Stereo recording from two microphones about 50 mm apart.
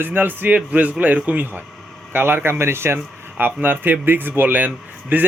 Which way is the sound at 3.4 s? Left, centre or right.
Right.